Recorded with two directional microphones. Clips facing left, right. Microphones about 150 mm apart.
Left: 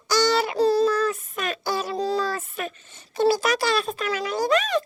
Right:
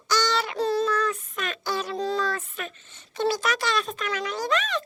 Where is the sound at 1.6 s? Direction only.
10° left (ahead or behind).